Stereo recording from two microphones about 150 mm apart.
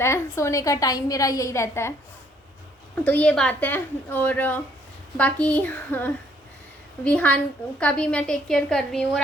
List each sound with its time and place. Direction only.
0.0 s a woman's voice: 20° left (ahead or behind)
2.9 s a woman's voice: 10° left (ahead or behind)